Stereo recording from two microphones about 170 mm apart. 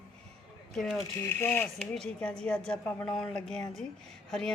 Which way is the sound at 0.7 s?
Centre (ahead or behind).